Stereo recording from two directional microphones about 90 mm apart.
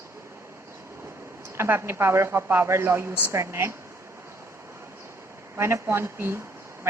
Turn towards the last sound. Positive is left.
turn(degrees=-30)  # may be behind; listen again after turning